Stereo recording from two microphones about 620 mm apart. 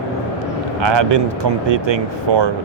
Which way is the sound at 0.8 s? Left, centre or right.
Right.